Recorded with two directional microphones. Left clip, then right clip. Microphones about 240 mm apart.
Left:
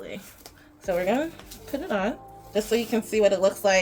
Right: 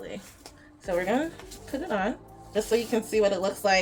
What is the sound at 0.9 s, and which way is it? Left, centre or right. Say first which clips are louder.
Speech: left 2 dB; centre.